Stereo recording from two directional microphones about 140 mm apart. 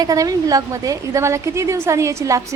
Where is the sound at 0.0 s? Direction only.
25° right (ahead or behind).